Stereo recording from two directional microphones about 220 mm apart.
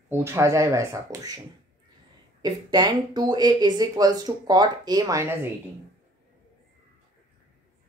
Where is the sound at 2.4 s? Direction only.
20° right (ahead or behind).